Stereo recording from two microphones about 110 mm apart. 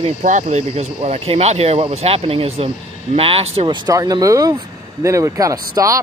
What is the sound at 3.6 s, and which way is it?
Speech, 35° right (ahead or behind).